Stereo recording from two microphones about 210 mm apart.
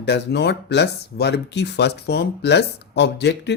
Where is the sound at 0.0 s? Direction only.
55° left (ahead or behind).